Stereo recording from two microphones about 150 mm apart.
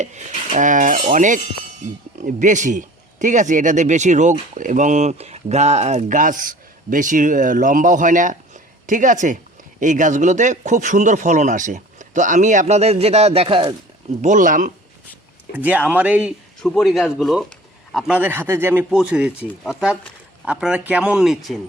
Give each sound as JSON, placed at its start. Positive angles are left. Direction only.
{"t": 0.0, "sound": "a man's voice", "side_deg": -55}
{"t": 14.2, "sound": "speech", "side_deg": -55}
{"t": 15.5, "sound": "a man's voice", "side_deg": -10}
{"t": 16.6, "sound": "a man's voice", "side_deg": 0}